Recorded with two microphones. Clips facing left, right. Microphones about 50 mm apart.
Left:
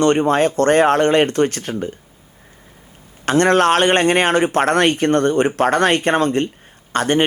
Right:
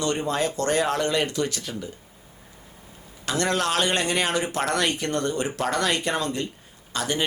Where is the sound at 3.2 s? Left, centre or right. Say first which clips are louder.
Left 11 dB; left.